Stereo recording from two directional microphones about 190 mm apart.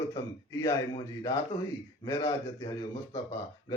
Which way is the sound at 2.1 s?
15° left (ahead or behind).